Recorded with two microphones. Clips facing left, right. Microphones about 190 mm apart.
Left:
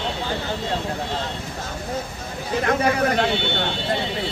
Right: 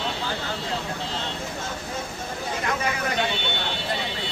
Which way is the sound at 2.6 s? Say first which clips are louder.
Left 9 dB; 55° left (ahead or behind).